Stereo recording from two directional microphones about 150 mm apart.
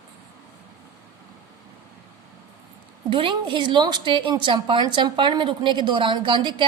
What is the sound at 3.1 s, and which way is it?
A woman's voice, 35° right (ahead or behind).